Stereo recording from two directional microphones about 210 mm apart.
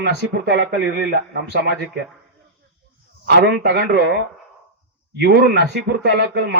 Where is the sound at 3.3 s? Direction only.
50° right (ahead or behind).